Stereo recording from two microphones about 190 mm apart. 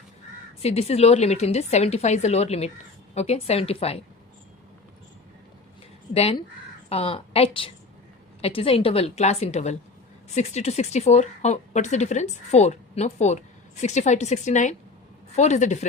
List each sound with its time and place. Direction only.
0.6 s speech: 35° left (ahead or behind)
6.1 s speech: 30° left (ahead or behind)